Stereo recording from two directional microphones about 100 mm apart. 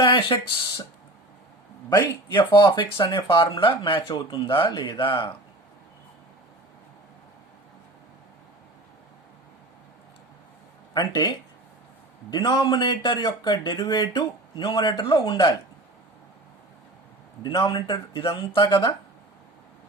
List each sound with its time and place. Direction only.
0.0 s speech: 55° left (ahead or behind)
1.9 s speech: 40° left (ahead or behind)
4.4 s speech: 60° left (ahead or behind)
4.7 s speech: 50° left (ahead or behind)
10.9 s speech: 40° left (ahead or behind)
17.4 s speech: 50° left (ahead or behind)